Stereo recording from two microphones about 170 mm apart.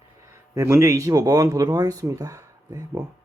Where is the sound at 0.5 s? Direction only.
15° right (ahead or behind).